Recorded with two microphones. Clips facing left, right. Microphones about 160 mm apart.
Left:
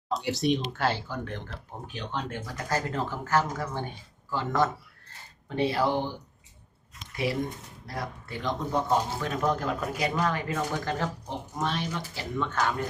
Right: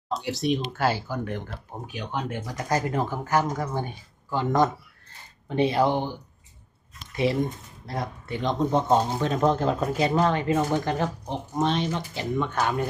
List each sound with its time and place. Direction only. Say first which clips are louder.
0.1 s speech: even; centre (ahead or behind); by 6.1 s 20° right (ahead or behind)
7.9 s speech: right 5 dB; 20° right (ahead or behind)